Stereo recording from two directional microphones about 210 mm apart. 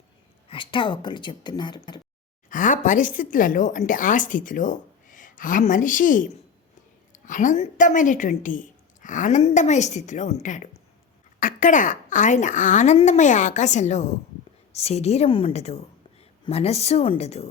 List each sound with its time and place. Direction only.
0.4 s speech: 25° left (ahead or behind)
2.5 s a woman's voice: 40° left (ahead or behind)